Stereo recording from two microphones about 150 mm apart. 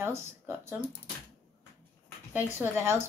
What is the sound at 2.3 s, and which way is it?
Speech, 15° right (ahead or behind).